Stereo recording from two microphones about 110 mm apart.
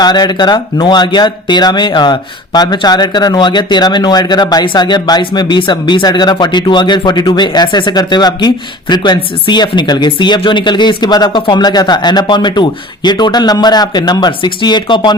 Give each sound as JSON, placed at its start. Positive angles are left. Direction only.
{"t": 0.0, "sound": "speech", "side_deg": 40}